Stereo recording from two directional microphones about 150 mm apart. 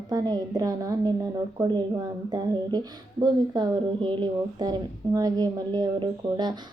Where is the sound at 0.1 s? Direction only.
25° right (ahead or behind).